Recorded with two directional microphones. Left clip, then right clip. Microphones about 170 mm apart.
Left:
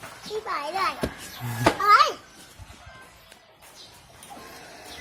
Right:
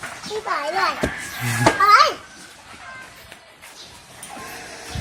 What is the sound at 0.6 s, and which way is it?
Speech, 30° left (ahead or behind).